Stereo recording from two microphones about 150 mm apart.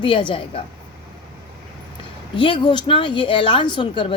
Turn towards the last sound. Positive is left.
turn(degrees=30)  # may be behind; listen again after turning